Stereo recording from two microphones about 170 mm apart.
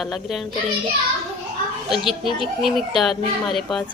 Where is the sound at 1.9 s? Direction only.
Centre (ahead or behind).